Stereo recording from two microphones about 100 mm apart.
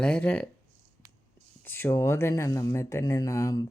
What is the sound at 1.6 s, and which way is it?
Speech, 20° left (ahead or behind).